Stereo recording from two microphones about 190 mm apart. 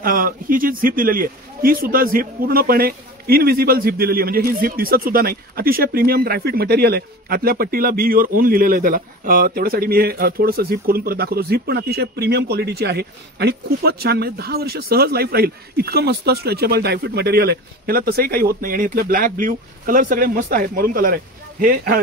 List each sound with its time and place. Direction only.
0.0 s speech: 50° right (ahead or behind)